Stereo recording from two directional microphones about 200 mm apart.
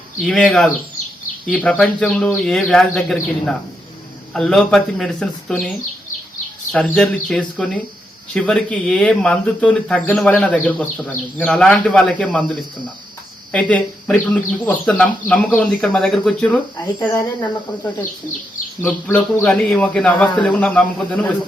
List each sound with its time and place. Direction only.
0.2 s speech: centre (ahead or behind)
6.7 s speech: 5° left (ahead or behind)
17.0 s a man's voice: 15° left (ahead or behind)
18.8 s a man's voice: 10° left (ahead or behind)